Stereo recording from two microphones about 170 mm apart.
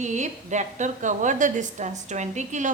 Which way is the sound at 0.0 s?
45° right (ahead or behind).